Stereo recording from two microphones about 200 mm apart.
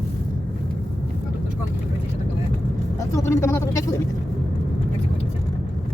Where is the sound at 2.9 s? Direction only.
15° left (ahead or behind).